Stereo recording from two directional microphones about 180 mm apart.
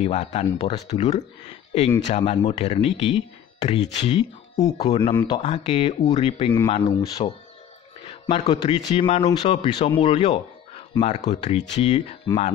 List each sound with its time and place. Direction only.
0.0 s speech: 40° left (ahead or behind)
4.6 s speech: 20° left (ahead or behind)
4.8 s speech: 30° left (ahead or behind)
6.5 s speech: 25° left (ahead or behind)